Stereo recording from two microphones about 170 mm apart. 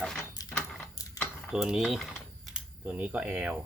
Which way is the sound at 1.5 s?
5° right (ahead or behind).